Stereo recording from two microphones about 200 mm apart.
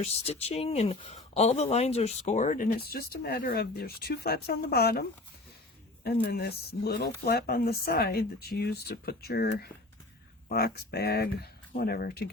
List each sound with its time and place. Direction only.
0.0 s a woman's voice: 30° left (ahead or behind); by 12.3 s 50° left (ahead or behind)